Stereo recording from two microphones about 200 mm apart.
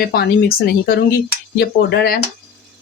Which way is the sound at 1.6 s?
55° left (ahead or behind).